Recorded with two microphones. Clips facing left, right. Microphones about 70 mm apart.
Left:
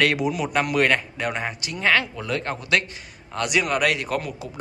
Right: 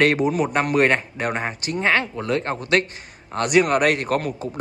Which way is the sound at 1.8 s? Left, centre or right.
Right.